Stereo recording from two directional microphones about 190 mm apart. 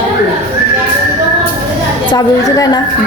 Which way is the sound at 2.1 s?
20° left (ahead or behind).